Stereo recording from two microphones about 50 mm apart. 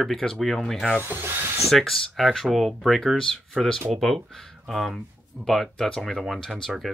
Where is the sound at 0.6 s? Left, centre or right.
Centre.